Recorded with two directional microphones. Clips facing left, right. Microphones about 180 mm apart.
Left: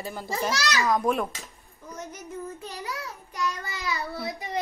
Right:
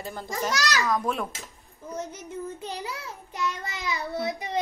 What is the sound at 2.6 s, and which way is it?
Child singing, 20° right (ahead or behind).